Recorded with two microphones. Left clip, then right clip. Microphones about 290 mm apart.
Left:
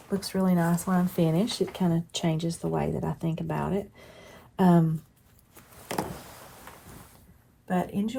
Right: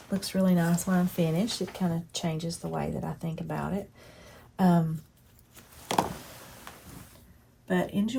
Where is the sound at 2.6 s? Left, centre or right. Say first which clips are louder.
Left 4 dB; left.